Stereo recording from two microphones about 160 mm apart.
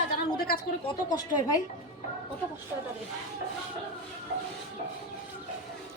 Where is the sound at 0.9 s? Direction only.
25° left (ahead or behind).